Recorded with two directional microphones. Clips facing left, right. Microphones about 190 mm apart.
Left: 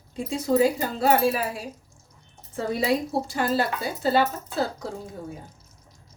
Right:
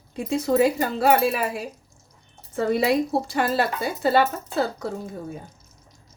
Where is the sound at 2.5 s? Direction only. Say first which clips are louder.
Right 4 dB; 65° right (ahead or behind).